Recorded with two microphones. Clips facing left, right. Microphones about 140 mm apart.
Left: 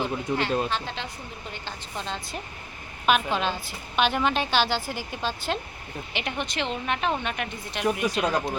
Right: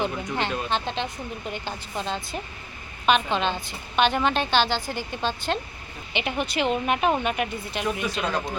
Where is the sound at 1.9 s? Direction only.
Centre (ahead or behind).